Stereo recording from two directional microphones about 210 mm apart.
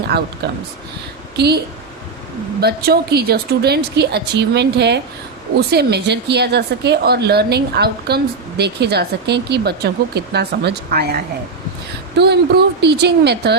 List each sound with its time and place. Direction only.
1.4 s a woman's voice: 50° right (ahead or behind)